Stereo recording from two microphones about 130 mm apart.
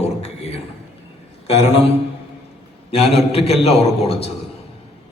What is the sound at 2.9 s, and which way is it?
A man's voice, 50° left (ahead or behind).